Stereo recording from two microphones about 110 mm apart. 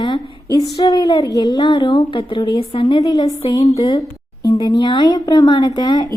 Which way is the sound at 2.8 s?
35° left (ahead or behind).